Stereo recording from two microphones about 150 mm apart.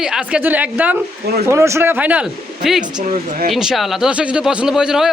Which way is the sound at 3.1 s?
70° right (ahead or behind).